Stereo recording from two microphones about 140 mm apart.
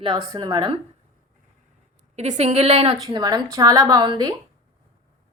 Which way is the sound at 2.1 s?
55° right (ahead or behind).